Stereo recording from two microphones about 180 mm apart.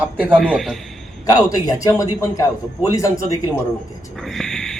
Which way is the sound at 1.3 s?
20° left (ahead or behind).